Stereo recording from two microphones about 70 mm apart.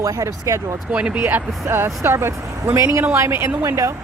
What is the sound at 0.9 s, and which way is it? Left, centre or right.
Speech, centre.